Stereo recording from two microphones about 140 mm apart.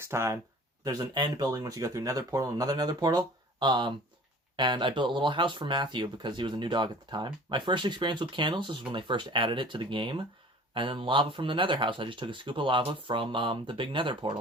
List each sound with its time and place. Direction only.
0.0 s speech: 20° right (ahead or behind)
0.9 s speech: 30° right (ahead or behind)